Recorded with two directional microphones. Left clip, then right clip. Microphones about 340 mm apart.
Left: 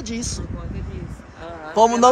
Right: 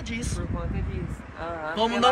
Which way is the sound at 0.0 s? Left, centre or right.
Centre.